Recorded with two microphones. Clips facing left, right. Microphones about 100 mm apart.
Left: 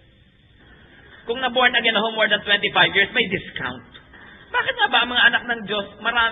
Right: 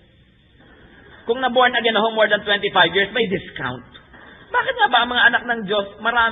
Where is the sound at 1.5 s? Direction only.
15° right (ahead or behind).